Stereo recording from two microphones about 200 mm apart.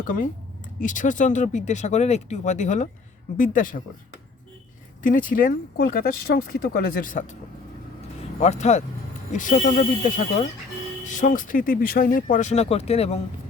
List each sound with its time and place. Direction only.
0.8 s speech: 40° left (ahead or behind)
5.0 s speech: 45° left (ahead or behind)
8.4 s speech: 35° left (ahead or behind)